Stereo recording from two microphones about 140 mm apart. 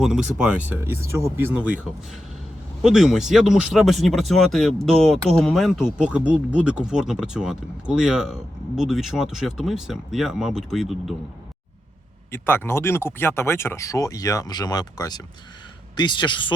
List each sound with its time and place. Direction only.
0.0 s speech: 5° right (ahead or behind)
12.3 s a man's voice: 15° left (ahead or behind); by 16.5 s 35° left (ahead or behind)